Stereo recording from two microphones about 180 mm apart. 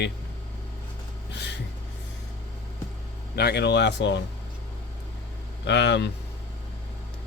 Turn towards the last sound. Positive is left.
turn(degrees=75)  # may be behind; listen again after turning